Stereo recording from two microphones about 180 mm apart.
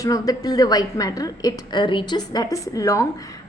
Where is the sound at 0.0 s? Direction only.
20° left (ahead or behind).